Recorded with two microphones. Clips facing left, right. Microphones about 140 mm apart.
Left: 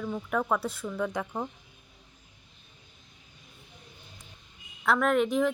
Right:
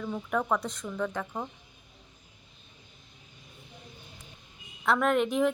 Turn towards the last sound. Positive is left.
turn(degrees=0)  # may be behind; listen again after turning